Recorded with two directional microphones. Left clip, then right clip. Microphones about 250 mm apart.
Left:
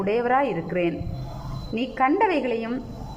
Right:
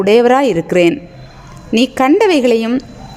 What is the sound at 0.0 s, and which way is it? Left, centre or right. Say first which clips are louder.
Speech: right 12 dB; right.